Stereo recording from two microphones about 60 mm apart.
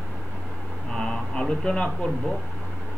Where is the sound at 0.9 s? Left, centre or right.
Centre.